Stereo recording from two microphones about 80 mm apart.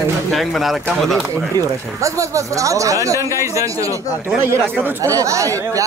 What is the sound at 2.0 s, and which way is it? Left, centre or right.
Speech, right.